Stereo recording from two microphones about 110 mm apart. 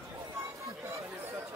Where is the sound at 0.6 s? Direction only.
25° right (ahead or behind).